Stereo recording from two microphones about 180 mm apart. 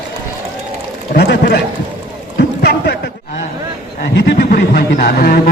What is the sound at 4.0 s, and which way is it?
A man's voice, 55° left (ahead or behind).